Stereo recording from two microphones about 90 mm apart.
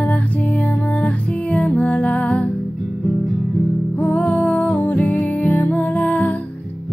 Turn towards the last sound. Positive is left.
turn(degrees=20)  # may be behind; listen again after turning